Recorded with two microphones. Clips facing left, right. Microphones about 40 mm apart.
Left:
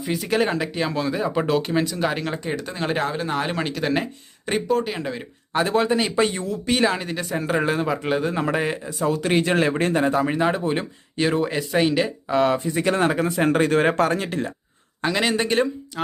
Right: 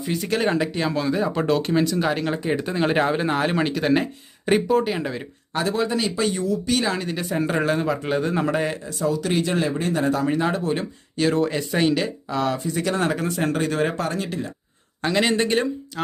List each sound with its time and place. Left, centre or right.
0.0 s speech: centre
3.3 s speech: centre
5.7 s speech: left
6.8 s speech: centre
7.2 s speech: centre
9.0 s speech: left
10.0 s speech: left
12.3 s speech: left
13.5 s speech: left
15.0 s speech: centre